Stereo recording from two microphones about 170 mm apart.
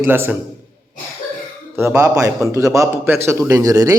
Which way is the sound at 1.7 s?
15° right (ahead or behind).